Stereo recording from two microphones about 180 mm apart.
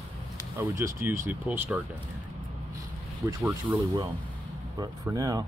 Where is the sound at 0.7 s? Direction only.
15° right (ahead or behind).